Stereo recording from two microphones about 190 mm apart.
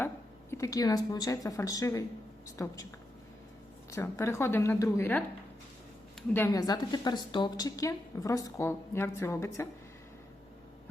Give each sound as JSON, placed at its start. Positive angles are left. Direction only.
{"t": 0.5, "sound": "a woman's voice", "side_deg": 20}
{"t": 3.9, "sound": "a woman's voice", "side_deg": 15}
{"t": 6.3, "sound": "a woman's voice", "side_deg": 15}